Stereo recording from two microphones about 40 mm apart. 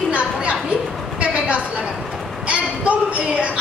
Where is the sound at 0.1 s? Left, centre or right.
Right.